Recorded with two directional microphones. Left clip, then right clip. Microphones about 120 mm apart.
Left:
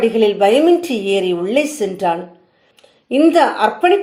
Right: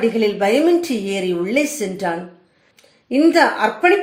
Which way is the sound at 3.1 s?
35° left (ahead or behind).